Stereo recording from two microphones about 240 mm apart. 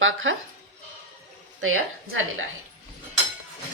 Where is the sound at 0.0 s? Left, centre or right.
Right.